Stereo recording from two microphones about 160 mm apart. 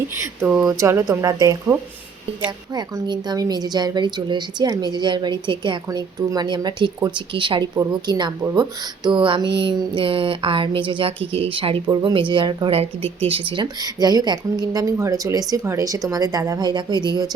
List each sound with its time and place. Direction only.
0.2 s a woman's voice: 15° right (ahead or behind)
2.7 s a woman's voice: 25° right (ahead or behind)